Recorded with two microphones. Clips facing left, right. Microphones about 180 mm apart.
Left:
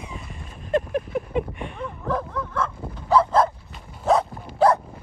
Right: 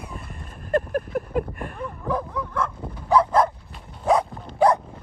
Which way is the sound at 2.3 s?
10° right (ahead or behind).